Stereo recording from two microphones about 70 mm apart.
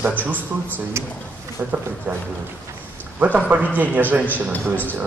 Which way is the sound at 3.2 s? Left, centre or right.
Right.